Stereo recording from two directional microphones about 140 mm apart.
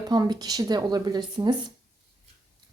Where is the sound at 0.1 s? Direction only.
30° right (ahead or behind).